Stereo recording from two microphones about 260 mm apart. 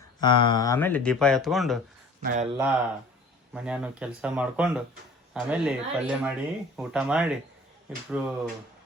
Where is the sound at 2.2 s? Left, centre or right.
Right.